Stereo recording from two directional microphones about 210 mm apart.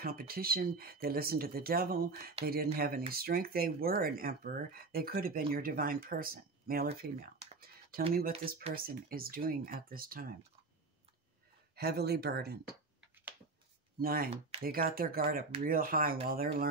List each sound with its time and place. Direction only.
0.0 s speech: 45° right (ahead or behind)
8.7 s speech: 45° right (ahead or behind)
11.7 s speech: 50° right (ahead or behind)
13.9 s speech: 45° right (ahead or behind)